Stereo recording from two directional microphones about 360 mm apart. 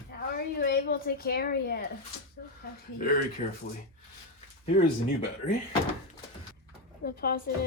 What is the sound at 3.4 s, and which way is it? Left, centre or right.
Speech, left.